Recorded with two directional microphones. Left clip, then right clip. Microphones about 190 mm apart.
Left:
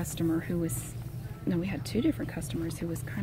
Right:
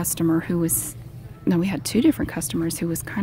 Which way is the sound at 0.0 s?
40° right (ahead or behind).